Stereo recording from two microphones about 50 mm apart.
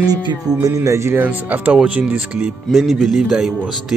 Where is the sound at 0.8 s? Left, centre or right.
Right.